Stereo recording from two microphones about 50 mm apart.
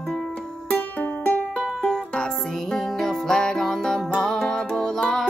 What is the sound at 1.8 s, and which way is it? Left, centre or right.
Music, centre.